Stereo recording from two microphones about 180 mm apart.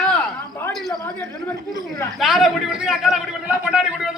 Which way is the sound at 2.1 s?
Centre (ahead or behind).